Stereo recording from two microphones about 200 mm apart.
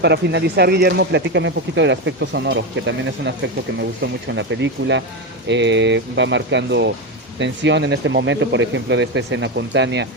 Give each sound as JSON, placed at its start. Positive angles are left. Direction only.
{"t": 0.0, "sound": "speech", "side_deg": -60}